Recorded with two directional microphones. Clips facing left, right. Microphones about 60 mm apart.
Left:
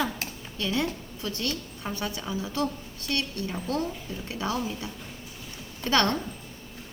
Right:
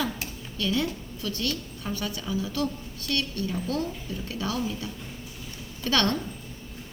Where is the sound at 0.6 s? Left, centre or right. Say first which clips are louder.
Right 1 dB; left.